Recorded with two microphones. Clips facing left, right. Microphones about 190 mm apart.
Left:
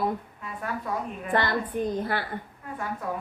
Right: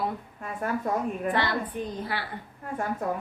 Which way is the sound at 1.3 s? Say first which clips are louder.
Left 6 dB; 50° left (ahead or behind).